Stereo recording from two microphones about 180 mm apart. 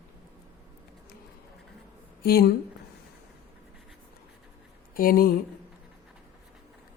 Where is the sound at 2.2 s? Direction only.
55° left (ahead or behind).